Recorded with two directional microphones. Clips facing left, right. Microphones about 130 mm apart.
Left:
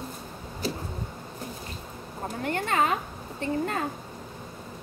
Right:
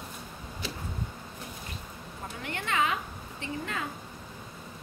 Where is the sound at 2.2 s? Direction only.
40° left (ahead or behind).